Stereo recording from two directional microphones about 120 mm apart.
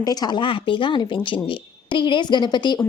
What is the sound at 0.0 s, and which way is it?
Speech, 30° left (ahead or behind).